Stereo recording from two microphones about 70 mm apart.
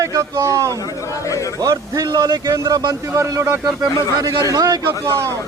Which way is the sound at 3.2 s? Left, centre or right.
Right.